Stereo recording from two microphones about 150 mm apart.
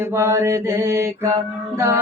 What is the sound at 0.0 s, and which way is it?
Mantra, 20° right (ahead or behind).